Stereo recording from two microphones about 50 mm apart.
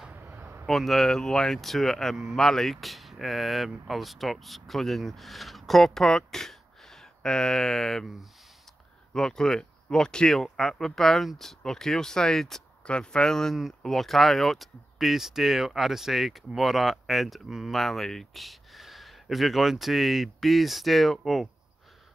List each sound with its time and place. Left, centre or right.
0.1 s a sound: right
0.7 s speech: centre
9.1 s speech: centre
12.8 s speech: centre
17.7 s speech: centre